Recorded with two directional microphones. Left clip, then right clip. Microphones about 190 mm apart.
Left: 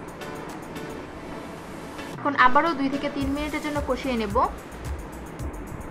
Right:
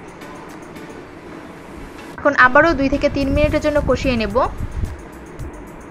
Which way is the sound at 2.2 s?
30° right (ahead or behind).